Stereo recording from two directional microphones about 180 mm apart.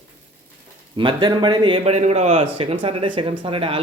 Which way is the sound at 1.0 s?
25° right (ahead or behind).